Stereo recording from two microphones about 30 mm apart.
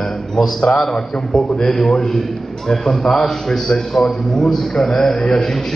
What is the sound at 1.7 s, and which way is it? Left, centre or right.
A man's voice, centre.